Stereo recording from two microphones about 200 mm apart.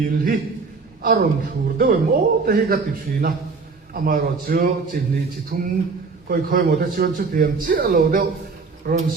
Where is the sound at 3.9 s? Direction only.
45° right (ahead or behind).